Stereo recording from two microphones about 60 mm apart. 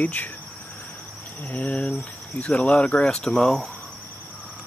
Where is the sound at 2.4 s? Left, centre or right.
Left.